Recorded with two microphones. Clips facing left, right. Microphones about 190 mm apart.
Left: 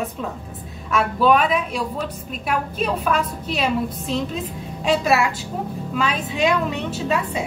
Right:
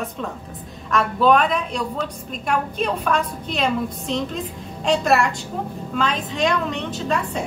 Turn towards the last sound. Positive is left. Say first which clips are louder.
# left 1 dB
turn(degrees=5)  # may be behind; listen again after turning